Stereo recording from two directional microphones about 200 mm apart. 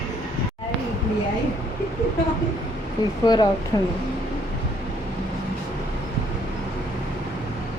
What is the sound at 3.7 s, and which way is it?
Speech, 20° left (ahead or behind).